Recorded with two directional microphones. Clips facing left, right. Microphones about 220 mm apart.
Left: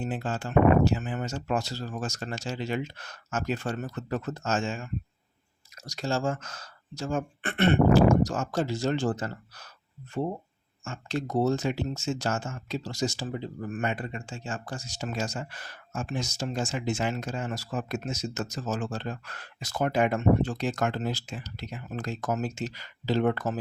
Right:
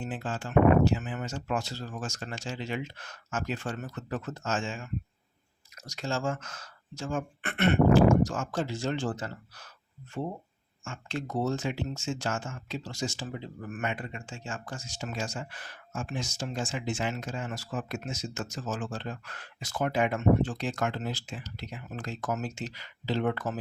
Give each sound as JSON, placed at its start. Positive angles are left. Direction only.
{"t": 0.0, "sound": "speech", "side_deg": 40}
{"t": 5.8, "sound": "speech", "side_deg": 35}
{"t": 10.8, "sound": "speech", "side_deg": 40}